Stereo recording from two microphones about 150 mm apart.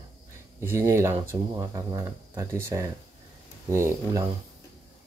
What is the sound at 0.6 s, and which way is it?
Speech, 20° right (ahead or behind).